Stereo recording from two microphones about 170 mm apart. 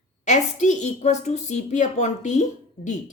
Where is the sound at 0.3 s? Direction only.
45° left (ahead or behind).